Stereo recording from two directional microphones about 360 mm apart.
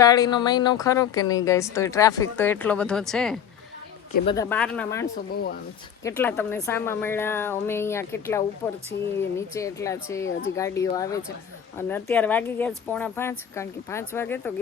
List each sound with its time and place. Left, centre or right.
0.0 s a woman's voice: centre
5.3 s speech: left
6.0 s a woman's voice: centre